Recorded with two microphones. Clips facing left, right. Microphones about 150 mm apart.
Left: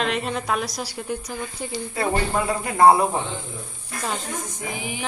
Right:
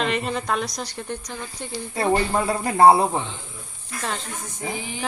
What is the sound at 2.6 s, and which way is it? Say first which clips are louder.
Speech: right 1 dB; 30° right (ahead or behind).